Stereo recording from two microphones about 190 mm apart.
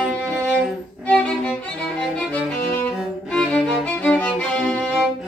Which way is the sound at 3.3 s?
5° left (ahead or behind).